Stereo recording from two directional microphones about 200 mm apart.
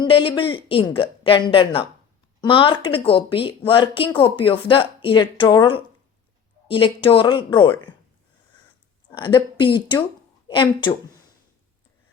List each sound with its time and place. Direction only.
0.0 s speech: 25° left (ahead or behind)
9.1 s speech: 25° left (ahead or behind)